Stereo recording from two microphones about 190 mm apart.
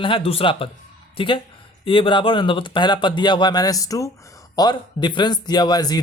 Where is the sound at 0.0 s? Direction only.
30° left (ahead or behind).